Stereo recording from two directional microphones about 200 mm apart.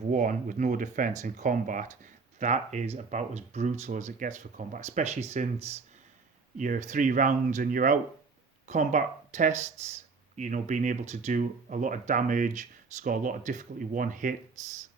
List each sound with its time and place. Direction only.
0.1 s speech: 40° right (ahead or behind)